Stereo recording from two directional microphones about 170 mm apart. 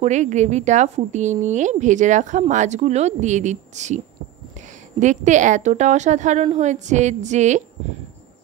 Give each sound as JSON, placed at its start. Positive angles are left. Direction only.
{"t": 0.0, "sound": "a woman's voice", "side_deg": -45}
{"t": 5.0, "sound": "a woman's voice", "side_deg": -45}